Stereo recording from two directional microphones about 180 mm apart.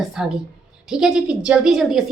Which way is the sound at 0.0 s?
Centre (ahead or behind).